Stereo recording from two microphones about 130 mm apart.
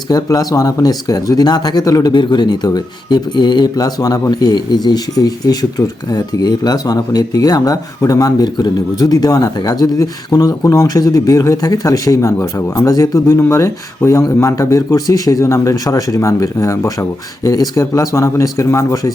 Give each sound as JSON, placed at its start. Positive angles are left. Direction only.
{"t": 0.1, "sound": "speech", "side_deg": 25}